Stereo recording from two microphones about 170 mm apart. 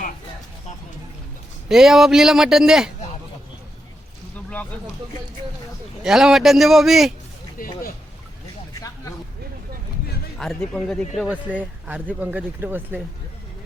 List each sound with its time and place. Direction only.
1.6 s speech: 5° right (ahead or behind)
6.0 s speech: 5° right (ahead or behind)
7.6 s a sound: 55° left (ahead or behind)
10.3 s speech: 5° left (ahead or behind)
11.3 s speech: 10° right (ahead or behind)